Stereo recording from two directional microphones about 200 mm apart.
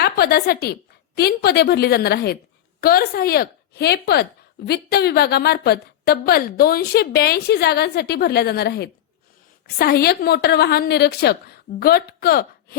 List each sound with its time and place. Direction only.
0.0 s a woman's voice: 50° left (ahead or behind)